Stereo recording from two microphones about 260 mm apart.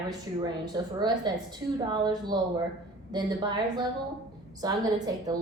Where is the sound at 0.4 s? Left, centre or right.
Centre.